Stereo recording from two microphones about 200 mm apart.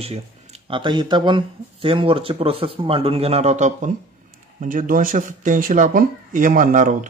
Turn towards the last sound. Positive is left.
turn(degrees=-40)  # may be behind; listen again after turning